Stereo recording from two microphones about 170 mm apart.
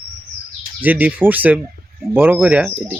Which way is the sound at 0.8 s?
10° right (ahead or behind).